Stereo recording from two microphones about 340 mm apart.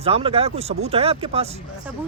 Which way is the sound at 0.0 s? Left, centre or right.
Centre.